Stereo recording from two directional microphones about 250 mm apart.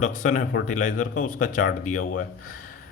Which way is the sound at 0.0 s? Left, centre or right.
Left.